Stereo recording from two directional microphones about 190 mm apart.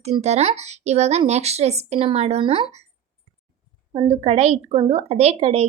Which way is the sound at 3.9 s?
30° right (ahead or behind).